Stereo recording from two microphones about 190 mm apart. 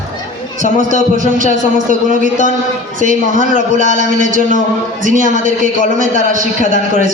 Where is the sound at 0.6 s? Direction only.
45° right (ahead or behind).